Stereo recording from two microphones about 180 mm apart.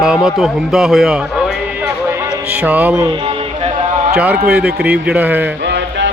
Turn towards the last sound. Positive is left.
turn(degrees=-75)  # may be behind; listen again after turning